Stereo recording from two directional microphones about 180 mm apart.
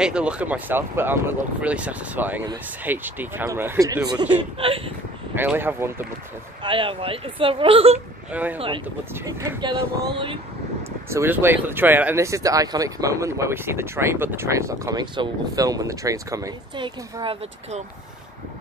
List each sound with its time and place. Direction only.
0.0 s speech: 5° right (ahead or behind)
4.6 s speech: 30° right (ahead or behind)
5.3 s speech: 10° right (ahead or behind)
6.6 s speech: 30° right (ahead or behind)
8.3 s speech: 10° right (ahead or behind)
8.5 s speech: 30° right (ahead or behind)
9.1 s speech: 15° right (ahead or behind)
11.1 s speech: 10° right (ahead or behind); by 17.8 s 35° right (ahead or behind)